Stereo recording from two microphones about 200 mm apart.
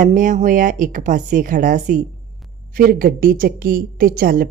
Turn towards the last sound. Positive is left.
turn(degrees=-45)  # may be behind; listen again after turning